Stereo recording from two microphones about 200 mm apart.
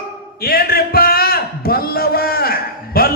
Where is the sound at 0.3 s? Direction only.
50° left (ahead or behind).